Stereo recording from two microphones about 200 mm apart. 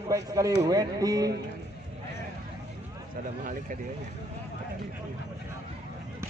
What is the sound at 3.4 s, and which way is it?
Speech, 40° right (ahead or behind).